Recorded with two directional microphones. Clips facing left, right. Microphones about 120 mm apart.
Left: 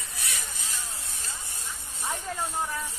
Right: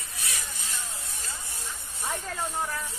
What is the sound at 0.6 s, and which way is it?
Spray, 40° left (ahead or behind).